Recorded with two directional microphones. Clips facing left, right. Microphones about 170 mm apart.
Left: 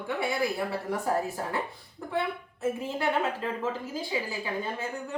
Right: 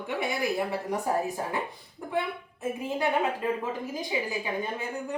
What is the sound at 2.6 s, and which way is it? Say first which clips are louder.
A woman's voice: even; 15° right (ahead or behind).